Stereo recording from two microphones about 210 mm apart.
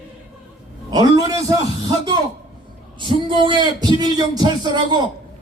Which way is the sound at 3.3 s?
20° right (ahead or behind).